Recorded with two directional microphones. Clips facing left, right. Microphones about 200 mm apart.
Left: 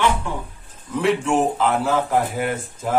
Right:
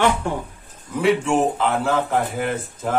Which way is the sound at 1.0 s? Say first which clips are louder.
Right 1 dB; centre (ahead or behind).